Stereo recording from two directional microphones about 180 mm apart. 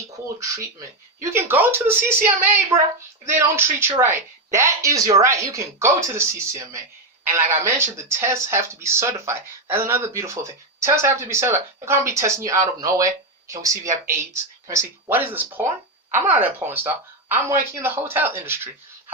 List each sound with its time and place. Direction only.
0.3 s speech: 15° right (ahead or behind)